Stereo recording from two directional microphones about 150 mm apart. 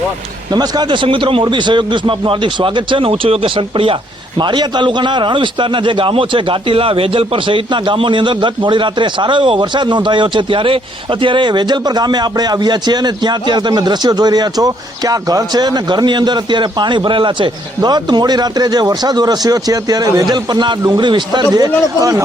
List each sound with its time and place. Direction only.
0.5 s a man's voice: 25° right (ahead or behind)